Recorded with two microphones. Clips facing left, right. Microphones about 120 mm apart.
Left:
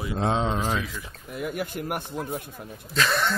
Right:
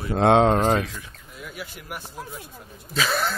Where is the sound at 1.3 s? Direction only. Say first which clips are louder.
Left 8 dB; 55° left (ahead or behind).